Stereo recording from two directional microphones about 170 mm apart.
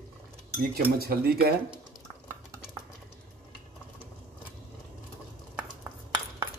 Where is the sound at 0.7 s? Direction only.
65° right (ahead or behind).